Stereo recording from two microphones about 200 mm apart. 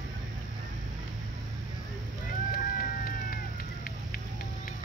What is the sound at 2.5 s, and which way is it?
Run, 45° left (ahead or behind).